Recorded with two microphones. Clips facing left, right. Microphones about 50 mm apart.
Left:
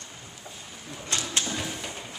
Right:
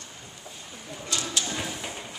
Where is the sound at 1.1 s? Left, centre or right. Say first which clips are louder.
Even; left.